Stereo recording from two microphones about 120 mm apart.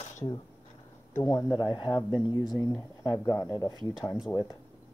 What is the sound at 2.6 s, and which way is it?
Speech, 25° left (ahead or behind).